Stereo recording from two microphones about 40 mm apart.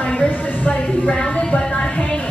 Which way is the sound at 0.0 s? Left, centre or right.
Left.